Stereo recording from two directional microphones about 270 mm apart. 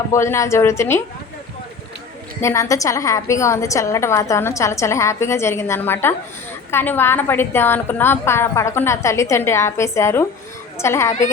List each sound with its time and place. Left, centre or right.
0.1 s a woman's voice: centre
2.4 s a woman's voice: centre